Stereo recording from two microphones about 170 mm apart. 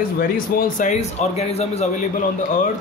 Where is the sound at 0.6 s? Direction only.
45° left (ahead or behind).